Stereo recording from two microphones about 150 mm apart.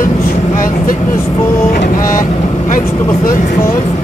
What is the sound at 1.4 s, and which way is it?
Speech, 15° left (ahead or behind).